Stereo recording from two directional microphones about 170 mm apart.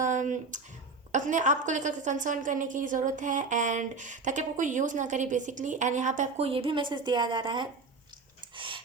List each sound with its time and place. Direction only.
0.0 s a woman's voice: 45° right (ahead or behind); by 7.7 s 25° right (ahead or behind)
8.5 s dog: 30° right (ahead or behind)